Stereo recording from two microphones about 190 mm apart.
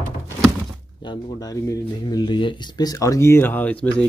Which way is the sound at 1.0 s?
20° left (ahead or behind).